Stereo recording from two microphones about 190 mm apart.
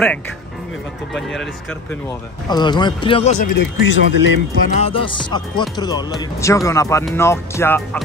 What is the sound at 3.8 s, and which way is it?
Speech, 75° left (ahead or behind).